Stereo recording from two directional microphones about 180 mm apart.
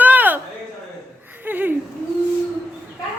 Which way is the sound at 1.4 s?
10° right (ahead or behind).